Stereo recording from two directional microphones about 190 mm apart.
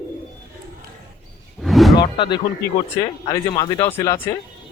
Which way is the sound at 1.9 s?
25° left (ahead or behind).